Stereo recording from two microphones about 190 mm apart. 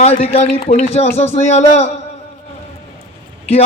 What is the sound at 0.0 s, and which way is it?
A man's voice, 30° left (ahead or behind).